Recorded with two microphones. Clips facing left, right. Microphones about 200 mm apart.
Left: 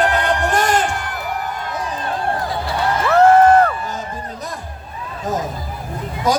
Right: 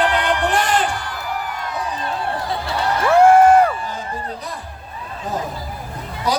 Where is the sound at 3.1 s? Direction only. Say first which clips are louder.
Even; 10° right (ahead or behind).